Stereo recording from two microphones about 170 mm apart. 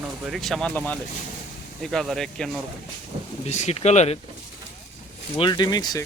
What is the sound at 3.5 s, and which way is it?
Speech, 40° left (ahead or behind).